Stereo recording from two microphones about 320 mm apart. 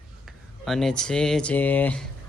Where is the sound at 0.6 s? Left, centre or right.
Centre.